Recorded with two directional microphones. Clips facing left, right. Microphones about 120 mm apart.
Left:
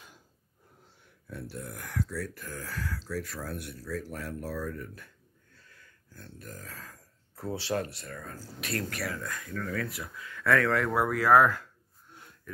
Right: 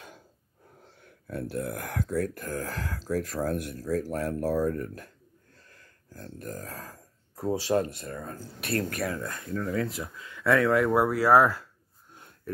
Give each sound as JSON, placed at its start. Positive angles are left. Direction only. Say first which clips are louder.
{"t": 1.2, "sound": "speech", "louder": "right 8 dB", "side_deg": -55}
{"t": 6.1, "sound": "speech", "louder": "right 7 dB", "side_deg": -40}